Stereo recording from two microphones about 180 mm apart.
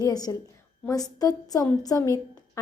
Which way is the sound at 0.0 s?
20° left (ahead or behind).